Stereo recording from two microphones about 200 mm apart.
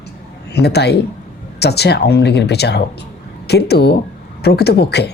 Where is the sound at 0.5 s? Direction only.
55° left (ahead or behind).